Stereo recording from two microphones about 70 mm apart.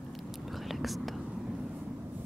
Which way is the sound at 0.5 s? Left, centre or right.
Centre.